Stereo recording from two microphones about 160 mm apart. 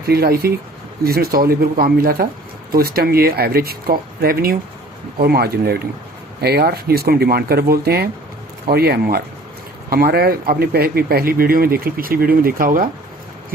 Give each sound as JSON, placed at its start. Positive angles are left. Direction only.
{"t": 0.1, "sound": "speech", "side_deg": -75}